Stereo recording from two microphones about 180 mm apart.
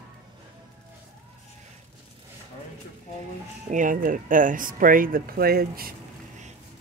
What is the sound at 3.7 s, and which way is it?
Speech, 45° right (ahead or behind).